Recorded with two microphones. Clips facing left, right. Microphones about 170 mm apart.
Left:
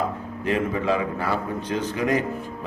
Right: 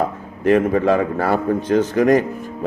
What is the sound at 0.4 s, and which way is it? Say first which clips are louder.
A man's voice: right 9 dB; 55° right (ahead or behind).